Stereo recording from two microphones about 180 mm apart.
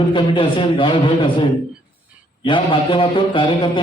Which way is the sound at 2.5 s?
25° left (ahead or behind).